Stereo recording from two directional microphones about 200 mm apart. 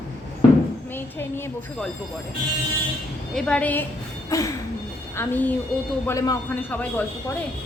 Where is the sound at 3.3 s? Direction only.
5° left (ahead or behind).